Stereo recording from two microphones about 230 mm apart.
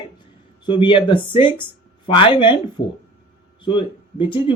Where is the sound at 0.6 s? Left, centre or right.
Left.